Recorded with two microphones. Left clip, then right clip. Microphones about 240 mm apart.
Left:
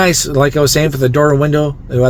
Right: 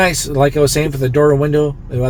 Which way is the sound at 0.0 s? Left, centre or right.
Left.